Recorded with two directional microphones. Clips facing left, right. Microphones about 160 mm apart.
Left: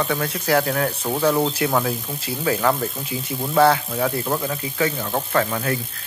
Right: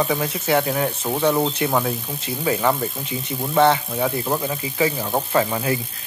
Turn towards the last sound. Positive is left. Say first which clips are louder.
# right 1 dB
turn(degrees=-10)  # may be behind; listen again after turning